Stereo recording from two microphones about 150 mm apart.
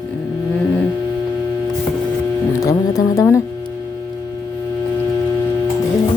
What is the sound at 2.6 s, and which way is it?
Speech, 20° left (ahead or behind).